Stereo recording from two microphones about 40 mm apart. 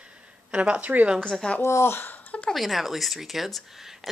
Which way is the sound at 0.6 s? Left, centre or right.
Right.